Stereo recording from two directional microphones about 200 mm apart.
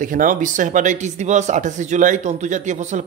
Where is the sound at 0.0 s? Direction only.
40° right (ahead or behind).